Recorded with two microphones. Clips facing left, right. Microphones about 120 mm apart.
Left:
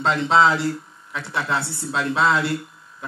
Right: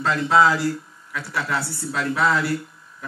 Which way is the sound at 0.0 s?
25° left (ahead or behind).